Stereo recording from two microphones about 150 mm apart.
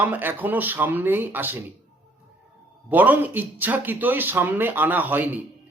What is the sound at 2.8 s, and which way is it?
A man's voice, 10° right (ahead or behind).